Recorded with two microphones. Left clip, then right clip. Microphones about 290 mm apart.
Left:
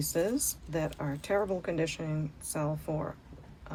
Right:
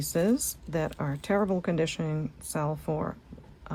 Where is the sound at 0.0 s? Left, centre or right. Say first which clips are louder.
Right 3 dB; right.